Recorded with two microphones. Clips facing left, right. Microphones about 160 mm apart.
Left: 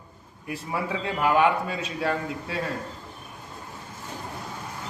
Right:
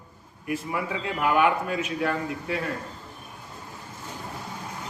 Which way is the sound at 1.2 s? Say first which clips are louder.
Left 1 dB; 30° left (ahead or behind).